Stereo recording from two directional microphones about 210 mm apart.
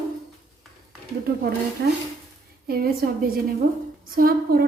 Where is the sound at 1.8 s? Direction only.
50° right (ahead or behind).